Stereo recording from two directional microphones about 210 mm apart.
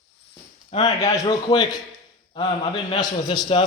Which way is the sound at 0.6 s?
20° left (ahead or behind).